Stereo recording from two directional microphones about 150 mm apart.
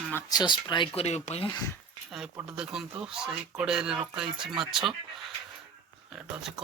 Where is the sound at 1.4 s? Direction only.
25° left (ahead or behind).